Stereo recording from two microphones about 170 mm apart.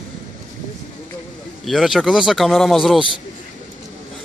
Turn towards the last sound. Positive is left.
turn(degrees=0)  # may be behind; listen again after turning